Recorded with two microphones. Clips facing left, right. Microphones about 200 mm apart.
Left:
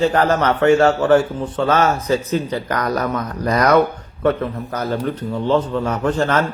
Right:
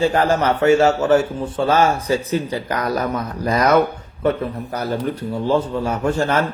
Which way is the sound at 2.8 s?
25° right (ahead or behind).